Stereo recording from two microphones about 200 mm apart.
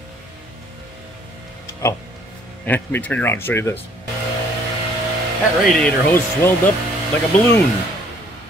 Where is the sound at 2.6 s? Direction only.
10° left (ahead or behind).